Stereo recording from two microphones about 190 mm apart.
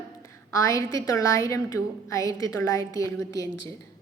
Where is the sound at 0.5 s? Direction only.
15° left (ahead or behind).